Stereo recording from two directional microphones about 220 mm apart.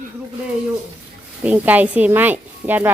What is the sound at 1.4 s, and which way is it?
Speech, 5° right (ahead or behind).